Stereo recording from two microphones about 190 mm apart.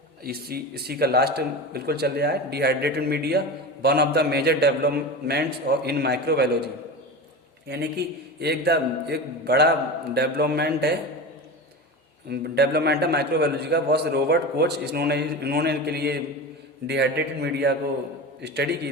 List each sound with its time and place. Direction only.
0.3 s a man's voice: 55° right (ahead or behind)
7.7 s a man's voice: 60° right (ahead or behind)
12.3 s a man's voice: 60° right (ahead or behind)